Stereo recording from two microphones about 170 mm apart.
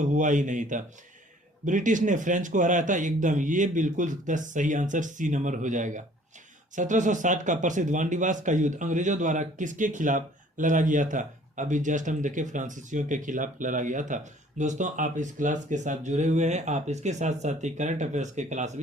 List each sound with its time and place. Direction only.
0.0 s speech: 50° right (ahead or behind)